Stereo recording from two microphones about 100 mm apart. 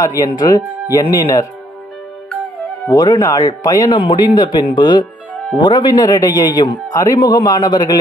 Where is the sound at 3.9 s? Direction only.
55° left (ahead or behind).